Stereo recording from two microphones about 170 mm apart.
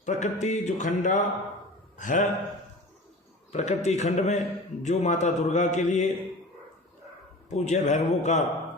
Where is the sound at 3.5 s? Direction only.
40° left (ahead or behind).